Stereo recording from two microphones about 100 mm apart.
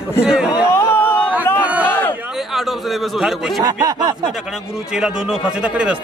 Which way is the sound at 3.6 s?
40° right (ahead or behind).